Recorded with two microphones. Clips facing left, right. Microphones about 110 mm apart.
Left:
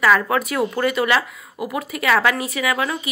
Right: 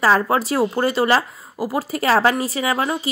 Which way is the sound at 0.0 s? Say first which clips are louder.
Right 1 dB; 30° right (ahead or behind).